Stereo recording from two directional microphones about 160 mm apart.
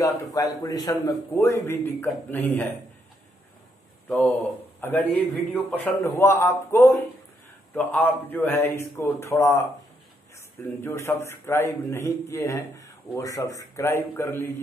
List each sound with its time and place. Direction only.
0.0 s a man's voice: 20° left (ahead or behind)
4.1 s a man's voice: 5° left (ahead or behind)
10.6 s a man's voice: 15° left (ahead or behind)